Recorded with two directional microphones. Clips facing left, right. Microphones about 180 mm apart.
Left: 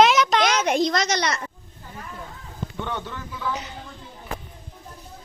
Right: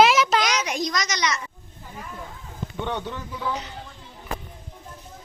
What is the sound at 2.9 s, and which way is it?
Speech, 15° right (ahead or behind).